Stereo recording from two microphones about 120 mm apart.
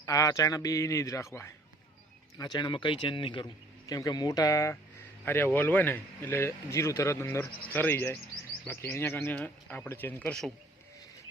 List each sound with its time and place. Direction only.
0.0 s speech: 30° left (ahead or behind)
2.4 s speech: 35° left (ahead or behind); by 10.5 s 10° left (ahead or behind)